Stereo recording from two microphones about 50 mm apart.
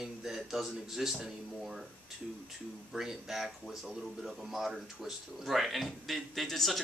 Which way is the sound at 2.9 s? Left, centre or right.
Centre.